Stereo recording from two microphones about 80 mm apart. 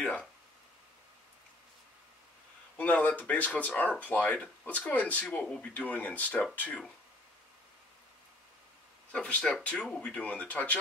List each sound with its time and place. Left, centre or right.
0.0 s speech: centre
2.8 s speech: centre
9.1 s speech: centre